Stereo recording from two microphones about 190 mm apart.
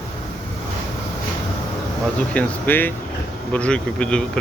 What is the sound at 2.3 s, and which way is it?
Speech, 10° left (ahead or behind).